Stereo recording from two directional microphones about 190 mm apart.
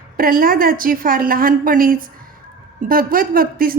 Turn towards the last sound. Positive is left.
turn(degrees=-50)  # may be behind; listen again after turning